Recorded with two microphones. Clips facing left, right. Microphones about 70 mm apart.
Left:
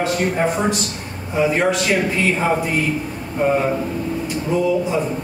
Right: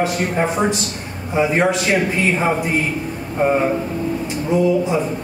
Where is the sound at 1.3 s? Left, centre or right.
Right.